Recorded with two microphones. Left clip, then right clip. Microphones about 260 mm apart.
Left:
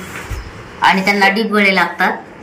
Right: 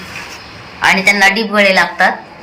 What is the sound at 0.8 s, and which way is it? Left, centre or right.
Speech, centre.